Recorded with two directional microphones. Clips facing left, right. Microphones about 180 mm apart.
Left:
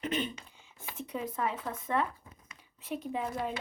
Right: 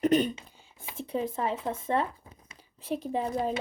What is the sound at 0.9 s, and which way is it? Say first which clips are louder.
Speech: right 5 dB; 30° right (ahead or behind).